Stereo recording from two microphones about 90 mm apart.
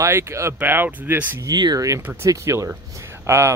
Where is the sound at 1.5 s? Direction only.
50° right (ahead or behind).